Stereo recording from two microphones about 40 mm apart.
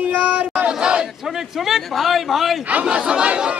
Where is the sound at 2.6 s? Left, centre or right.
Right.